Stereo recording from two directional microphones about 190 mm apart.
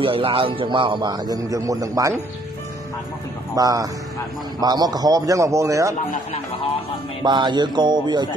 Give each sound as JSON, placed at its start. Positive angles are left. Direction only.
{"t": 0.0, "sound": "a man's voice", "side_deg": -30}
{"t": 3.5, "sound": "a man's voice", "side_deg": -20}
{"t": 7.2, "sound": "a man's voice", "side_deg": -25}